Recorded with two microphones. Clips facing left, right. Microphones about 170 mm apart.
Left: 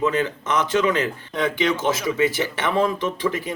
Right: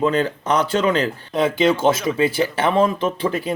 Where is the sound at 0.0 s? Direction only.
35° right (ahead or behind).